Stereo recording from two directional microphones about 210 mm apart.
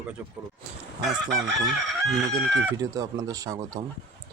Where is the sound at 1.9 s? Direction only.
Centre (ahead or behind).